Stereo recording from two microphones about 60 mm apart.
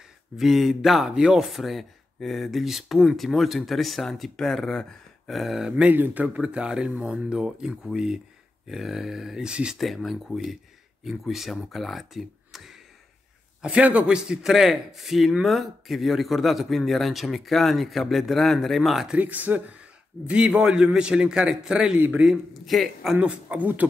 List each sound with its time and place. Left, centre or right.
0.4 s speech: centre
5.3 s speech: centre
5.7 s a man's voice: centre
5.9 s a man's voice: right; by 9.8 s centre
9.8 s speech: centre
13.6 s a man's voice: right; by 19.0 s centre
19.1 s speech: right
20.2 s a man's voice: centre
21.9 s speech: right
22.2 s speech: centre
23.1 s speech: centre